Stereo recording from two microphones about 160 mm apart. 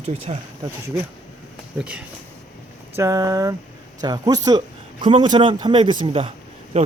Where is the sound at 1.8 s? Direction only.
5° right (ahead or behind).